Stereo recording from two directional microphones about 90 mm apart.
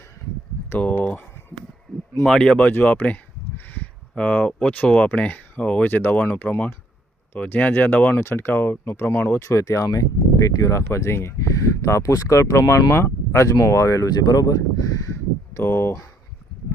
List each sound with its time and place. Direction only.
0.7 s speech: 20° left (ahead or behind)
2.2 s speech: 5° left (ahead or behind); by 16.0 s 35° left (ahead or behind)